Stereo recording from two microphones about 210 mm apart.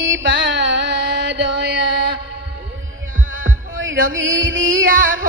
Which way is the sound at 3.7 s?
65° right (ahead or behind).